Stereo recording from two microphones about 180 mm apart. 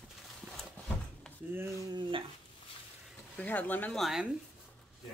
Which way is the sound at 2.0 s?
30° right (ahead or behind).